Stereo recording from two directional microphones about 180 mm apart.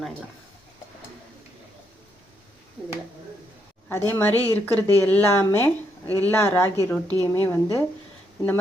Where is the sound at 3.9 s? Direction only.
15° left (ahead or behind).